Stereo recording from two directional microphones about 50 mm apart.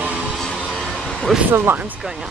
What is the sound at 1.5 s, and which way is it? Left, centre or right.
Speech, right.